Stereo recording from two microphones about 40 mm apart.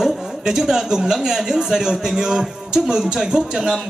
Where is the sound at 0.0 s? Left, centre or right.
Centre.